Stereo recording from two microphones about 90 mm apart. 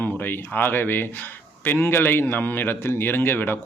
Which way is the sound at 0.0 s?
20° left (ahead or behind).